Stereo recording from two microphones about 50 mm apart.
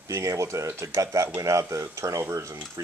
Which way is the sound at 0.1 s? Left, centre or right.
Right.